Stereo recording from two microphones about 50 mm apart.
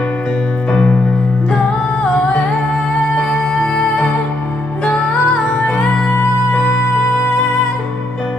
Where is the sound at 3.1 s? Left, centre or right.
Centre.